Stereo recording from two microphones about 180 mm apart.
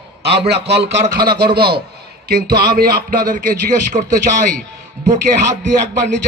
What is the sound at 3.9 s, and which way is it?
Speech, 25° right (ahead or behind).